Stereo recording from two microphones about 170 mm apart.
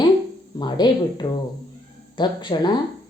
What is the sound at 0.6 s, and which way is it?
Speech, 25° left (ahead or behind).